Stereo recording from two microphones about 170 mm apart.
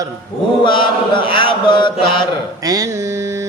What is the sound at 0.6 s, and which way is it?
Chant, 30° left (ahead or behind).